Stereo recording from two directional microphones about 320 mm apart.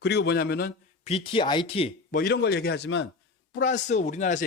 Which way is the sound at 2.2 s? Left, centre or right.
Left.